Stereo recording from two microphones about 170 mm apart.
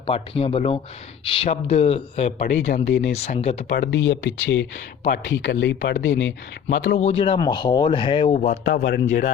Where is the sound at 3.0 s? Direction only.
40° left (ahead or behind).